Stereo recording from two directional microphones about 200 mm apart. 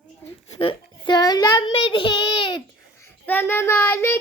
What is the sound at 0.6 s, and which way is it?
Child singing, 25° left (ahead or behind).